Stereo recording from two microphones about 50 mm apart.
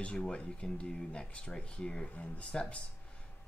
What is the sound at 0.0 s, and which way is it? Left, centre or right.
Speech, left.